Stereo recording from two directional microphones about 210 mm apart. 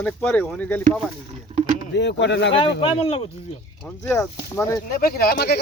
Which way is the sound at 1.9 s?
55° left (ahead or behind).